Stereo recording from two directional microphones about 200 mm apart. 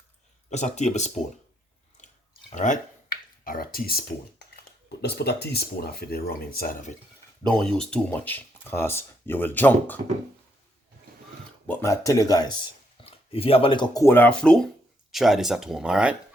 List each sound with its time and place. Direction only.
0.5 s speech: 35° left (ahead or behind)
2.0 s a sound: 35° left (ahead or behind)
2.5 s speech: 35° left (ahead or behind)
7.4 s speech: 5° left (ahead or behind)
11.7 s speech: 15° left (ahead or behind); by 16.1 s 5° right (ahead or behind)